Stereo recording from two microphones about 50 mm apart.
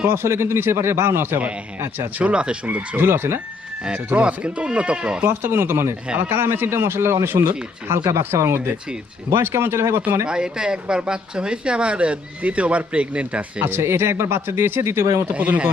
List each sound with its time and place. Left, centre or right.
0.1 s speech: right
2.1 s speech: right
2.6 s speech: right
3.0 s a man's voice: right
4.2 s speech: right
5.2 s a man's voice: right
7.9 s speech: right
10.2 s speech: centre
13.7 s speech: right
15.4 s speech: right